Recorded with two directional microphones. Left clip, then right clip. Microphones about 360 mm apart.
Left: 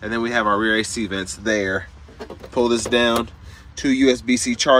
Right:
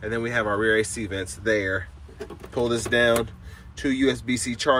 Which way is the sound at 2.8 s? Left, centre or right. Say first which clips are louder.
Right 1 dB; left.